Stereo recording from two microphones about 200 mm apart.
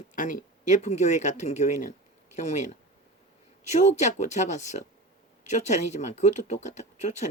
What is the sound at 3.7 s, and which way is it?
Speech, 35° left (ahead or behind).